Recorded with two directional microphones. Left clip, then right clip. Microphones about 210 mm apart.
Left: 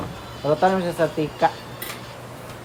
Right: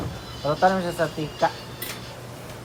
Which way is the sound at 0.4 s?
50° left (ahead or behind).